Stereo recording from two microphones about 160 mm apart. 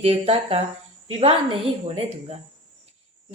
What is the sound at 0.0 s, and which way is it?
Speech, 40° right (ahead or behind).